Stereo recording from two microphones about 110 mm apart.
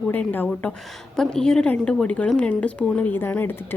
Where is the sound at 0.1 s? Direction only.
15° left (ahead or behind).